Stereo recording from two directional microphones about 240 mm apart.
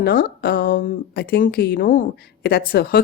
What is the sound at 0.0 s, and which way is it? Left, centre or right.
Speech, left.